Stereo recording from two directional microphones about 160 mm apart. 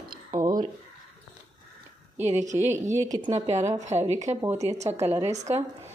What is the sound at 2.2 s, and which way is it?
Speech, 45° right (ahead or behind).